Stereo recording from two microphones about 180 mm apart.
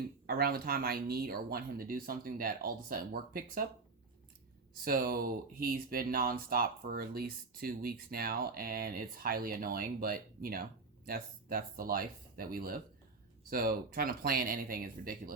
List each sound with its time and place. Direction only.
0.3 s speech: 60° right (ahead or behind)
4.7 s speech: 55° right (ahead or behind)